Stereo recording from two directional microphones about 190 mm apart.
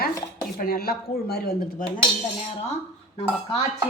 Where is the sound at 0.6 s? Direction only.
50° left (ahead or behind).